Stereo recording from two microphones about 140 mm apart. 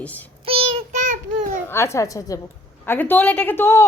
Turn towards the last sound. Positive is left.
turn(degrees=15)  # may be behind; listen again after turning